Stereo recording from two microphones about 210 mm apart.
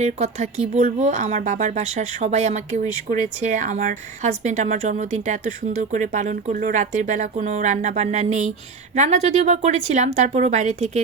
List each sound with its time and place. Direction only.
0.0 s speech: 30° right (ahead or behind)